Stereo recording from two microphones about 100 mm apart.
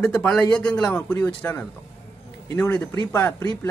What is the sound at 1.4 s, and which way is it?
A man's voice, 25° left (ahead or behind).